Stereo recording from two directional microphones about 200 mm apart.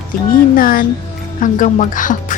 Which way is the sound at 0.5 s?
45° left (ahead or behind).